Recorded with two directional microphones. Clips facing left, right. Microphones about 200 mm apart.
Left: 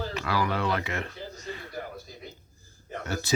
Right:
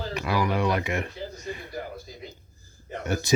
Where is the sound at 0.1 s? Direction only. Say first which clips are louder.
Right 6 dB; 15° right (ahead or behind).